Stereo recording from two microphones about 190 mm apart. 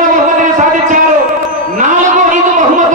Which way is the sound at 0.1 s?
40° right (ahead or behind).